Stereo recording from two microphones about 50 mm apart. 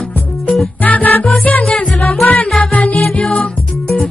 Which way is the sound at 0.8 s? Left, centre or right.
Left.